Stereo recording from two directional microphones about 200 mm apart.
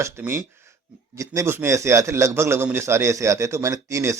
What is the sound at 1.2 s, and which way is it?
A man's voice, 15° right (ahead or behind).